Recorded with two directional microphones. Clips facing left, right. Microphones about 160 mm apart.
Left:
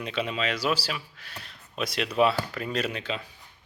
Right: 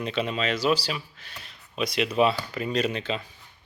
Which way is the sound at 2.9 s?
5° left (ahead or behind).